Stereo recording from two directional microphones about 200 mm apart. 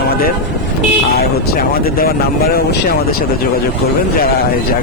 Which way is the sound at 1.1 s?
50° left (ahead or behind).